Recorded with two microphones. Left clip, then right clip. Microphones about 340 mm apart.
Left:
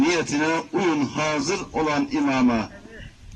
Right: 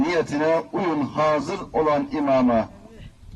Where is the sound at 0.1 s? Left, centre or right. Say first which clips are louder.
Right 2 dB; centre.